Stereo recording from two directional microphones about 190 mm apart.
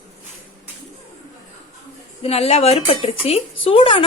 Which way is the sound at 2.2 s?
30° left (ahead or behind).